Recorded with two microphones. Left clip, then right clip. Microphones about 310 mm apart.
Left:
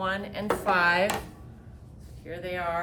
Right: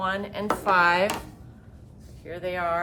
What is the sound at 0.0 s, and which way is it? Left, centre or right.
A woman's voice, centre.